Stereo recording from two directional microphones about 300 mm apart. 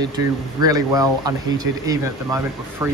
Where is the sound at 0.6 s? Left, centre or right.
Centre.